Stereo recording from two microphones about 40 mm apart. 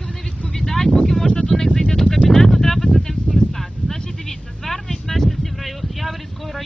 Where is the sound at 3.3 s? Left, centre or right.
Centre.